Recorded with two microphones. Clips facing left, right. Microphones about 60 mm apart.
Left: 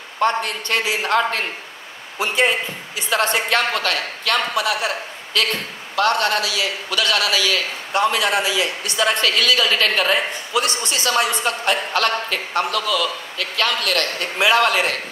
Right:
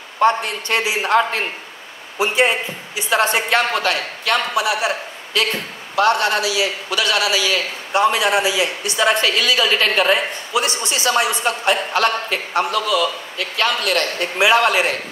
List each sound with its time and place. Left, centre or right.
0.2 s a man's voice: centre